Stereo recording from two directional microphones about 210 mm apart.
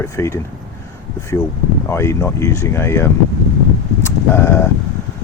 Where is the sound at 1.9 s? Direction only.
15° left (ahead or behind).